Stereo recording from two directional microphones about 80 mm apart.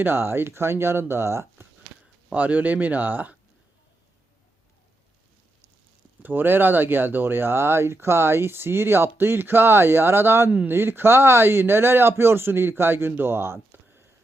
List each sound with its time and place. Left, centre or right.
0.0 s speech: right
2.3 s speech: centre
6.2 s speech: right